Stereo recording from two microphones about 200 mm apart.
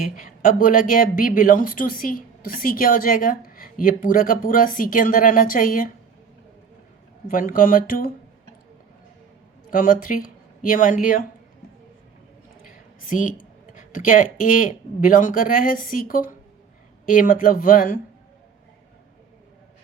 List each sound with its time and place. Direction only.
0.2 s a woman's voice: 40° left (ahead or behind)
7.3 s a woman's voice: 45° left (ahead or behind)
9.6 s speech: 45° left (ahead or behind)
12.6 s a woman's voice: 40° left (ahead or behind)